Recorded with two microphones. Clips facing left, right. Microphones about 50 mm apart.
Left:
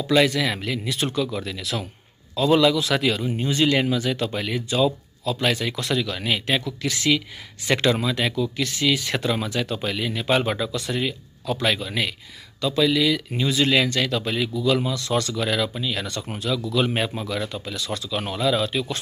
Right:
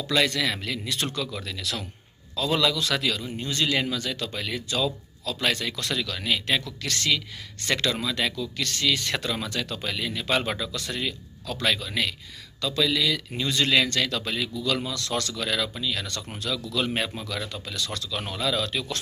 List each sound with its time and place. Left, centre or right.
0.0 s speech: centre
5.4 s speech: centre